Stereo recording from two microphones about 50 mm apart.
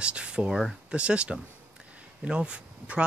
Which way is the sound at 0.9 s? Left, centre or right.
Right.